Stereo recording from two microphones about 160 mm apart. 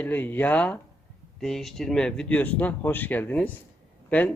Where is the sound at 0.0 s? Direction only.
10° left (ahead or behind).